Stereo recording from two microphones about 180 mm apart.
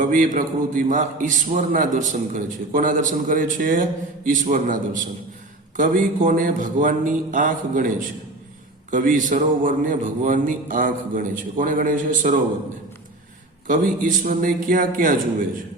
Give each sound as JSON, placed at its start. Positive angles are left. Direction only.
{"t": 0.0, "sound": "a man's voice", "side_deg": -45}
{"t": 13.7, "sound": "a man's voice", "side_deg": -45}